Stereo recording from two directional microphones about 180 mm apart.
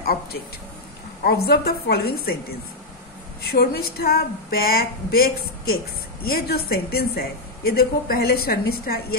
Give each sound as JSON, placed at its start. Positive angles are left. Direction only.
{"t": 0.0, "sound": "a sound", "side_deg": 60}
{"t": 1.2, "sound": "a woman's voice", "side_deg": 60}
{"t": 3.4, "sound": "a woman's voice", "side_deg": 60}